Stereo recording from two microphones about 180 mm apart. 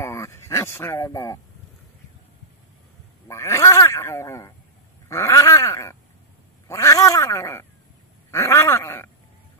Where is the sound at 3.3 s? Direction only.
15° left (ahead or behind).